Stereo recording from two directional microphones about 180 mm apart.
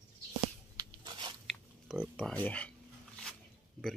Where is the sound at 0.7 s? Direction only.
25° right (ahead or behind).